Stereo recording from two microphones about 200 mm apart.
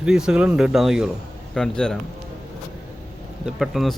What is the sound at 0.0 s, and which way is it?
Speech, 5° right (ahead or behind).